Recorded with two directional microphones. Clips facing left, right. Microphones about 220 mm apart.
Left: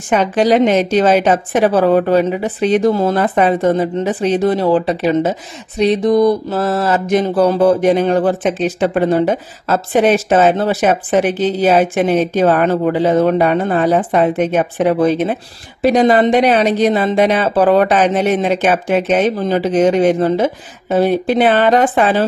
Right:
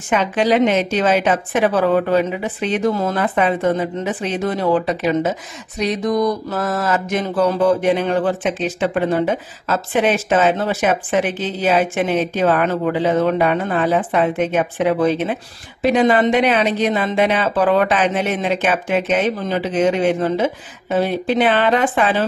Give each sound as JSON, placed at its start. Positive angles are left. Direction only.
{"t": 0.1, "sound": "mantra", "side_deg": 40}